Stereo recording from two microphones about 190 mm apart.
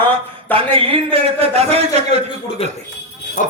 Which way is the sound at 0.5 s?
30° right (ahead or behind).